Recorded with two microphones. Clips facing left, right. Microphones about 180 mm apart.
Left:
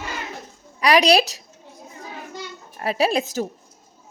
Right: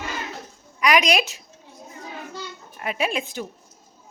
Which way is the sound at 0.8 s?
35° left (ahead or behind).